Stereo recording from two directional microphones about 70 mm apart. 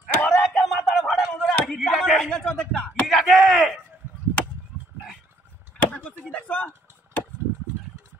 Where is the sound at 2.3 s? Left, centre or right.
Centre.